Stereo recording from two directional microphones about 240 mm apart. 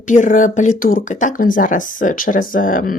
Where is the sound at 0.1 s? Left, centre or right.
Left.